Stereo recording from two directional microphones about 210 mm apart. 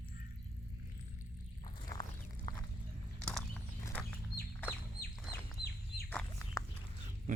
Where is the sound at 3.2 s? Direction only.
5° left (ahead or behind).